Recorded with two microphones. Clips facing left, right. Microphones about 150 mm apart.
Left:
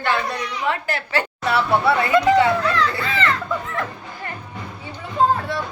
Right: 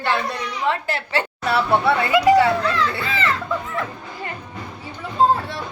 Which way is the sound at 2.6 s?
5° right (ahead or behind).